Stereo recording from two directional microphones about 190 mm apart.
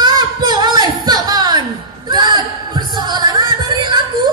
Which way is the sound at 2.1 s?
20° right (ahead or behind).